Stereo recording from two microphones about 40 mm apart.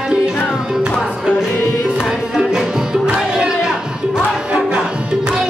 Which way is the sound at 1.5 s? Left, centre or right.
Left.